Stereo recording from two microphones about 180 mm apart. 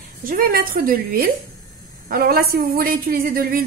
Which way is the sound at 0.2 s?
50° right (ahead or behind).